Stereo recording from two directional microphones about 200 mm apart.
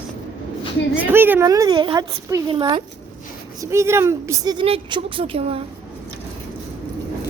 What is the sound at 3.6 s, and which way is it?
Speech, 15° right (ahead or behind).